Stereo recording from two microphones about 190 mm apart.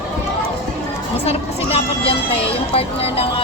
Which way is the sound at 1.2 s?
30° left (ahead or behind).